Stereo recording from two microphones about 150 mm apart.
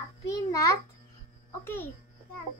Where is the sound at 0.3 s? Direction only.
25° left (ahead or behind).